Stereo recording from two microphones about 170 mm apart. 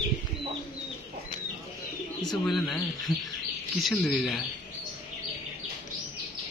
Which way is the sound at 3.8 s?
Centre (ahead or behind).